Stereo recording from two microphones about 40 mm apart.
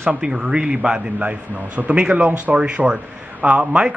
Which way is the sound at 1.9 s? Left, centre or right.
Right.